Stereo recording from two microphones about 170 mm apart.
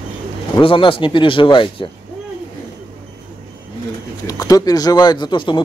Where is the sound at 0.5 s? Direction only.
30° left (ahead or behind).